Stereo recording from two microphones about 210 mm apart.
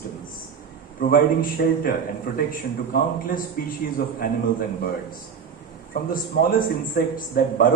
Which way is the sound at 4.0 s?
45° left (ahead or behind).